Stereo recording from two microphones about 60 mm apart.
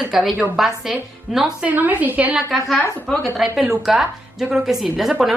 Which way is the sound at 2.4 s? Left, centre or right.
Centre.